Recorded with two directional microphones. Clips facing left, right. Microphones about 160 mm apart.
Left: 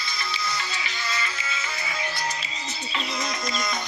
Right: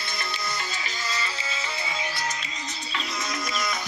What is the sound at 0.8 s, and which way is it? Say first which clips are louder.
Music: left 1 dB; 35° right (ahead or behind).